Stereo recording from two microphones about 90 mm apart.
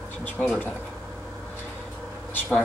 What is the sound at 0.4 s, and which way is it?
Speech, 15° left (ahead or behind).